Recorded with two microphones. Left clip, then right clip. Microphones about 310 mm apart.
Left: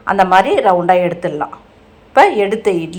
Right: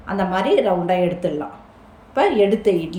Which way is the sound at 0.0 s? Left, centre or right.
Left.